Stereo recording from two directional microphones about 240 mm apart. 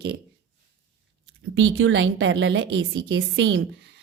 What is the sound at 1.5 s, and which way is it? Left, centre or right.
A woman's voice, right.